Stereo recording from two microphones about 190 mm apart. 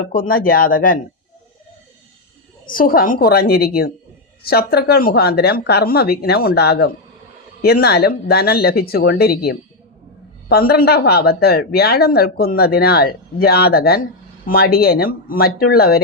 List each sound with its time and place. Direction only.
0.2 s speech: 50° left (ahead or behind)
2.6 s speech: 50° left (ahead or behind)